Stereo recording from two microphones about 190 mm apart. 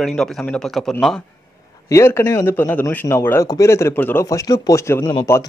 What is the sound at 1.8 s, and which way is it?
A man's voice, 15° left (ahead or behind).